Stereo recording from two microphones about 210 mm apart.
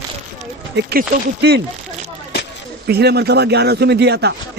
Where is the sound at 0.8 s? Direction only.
45° right (ahead or behind).